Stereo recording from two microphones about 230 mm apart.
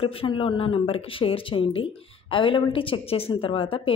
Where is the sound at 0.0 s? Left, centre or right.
Left.